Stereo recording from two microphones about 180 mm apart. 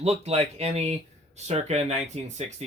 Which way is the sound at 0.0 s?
35° right (ahead or behind).